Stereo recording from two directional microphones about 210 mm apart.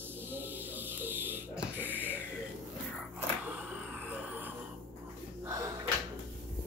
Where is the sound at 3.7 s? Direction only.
10° right (ahead or behind).